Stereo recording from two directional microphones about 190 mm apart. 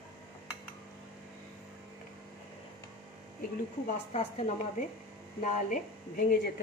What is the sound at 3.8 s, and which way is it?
A woman's voice, 35° left (ahead or behind).